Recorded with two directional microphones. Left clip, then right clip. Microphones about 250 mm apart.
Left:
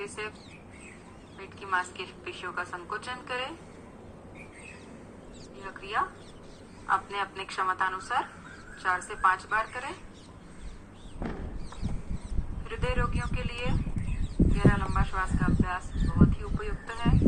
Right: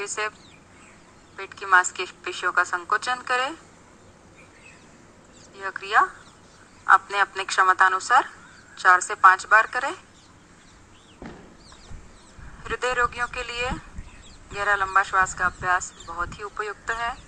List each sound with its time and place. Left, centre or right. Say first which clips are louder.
0.0 s a woman's voice: right 8 dB; right
1.4 s a woman's voice: right 11 dB; right
5.5 s a woman's voice: right 10 dB; right
12.6 s a woman's voice: right 9 dB; right